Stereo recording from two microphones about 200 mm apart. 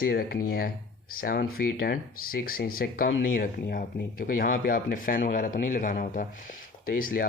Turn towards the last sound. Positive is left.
turn(degrees=45)  # may be behind; listen again after turning